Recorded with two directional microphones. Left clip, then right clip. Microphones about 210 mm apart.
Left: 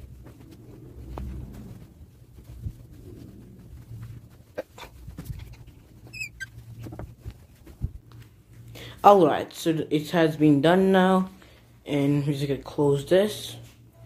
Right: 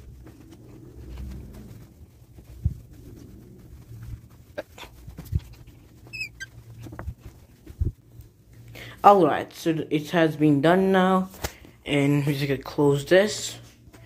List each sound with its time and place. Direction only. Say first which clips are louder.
4.6 s dog: even; 20° right (ahead or behind)
8.7 s speech: even; 5° right (ahead or behind)